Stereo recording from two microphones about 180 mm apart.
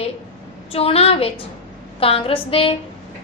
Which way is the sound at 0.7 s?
30° left (ahead or behind).